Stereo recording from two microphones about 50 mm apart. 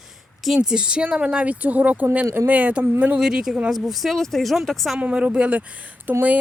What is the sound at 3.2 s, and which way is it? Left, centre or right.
Speech, centre.